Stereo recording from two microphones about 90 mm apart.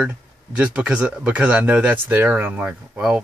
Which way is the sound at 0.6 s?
10° right (ahead or behind).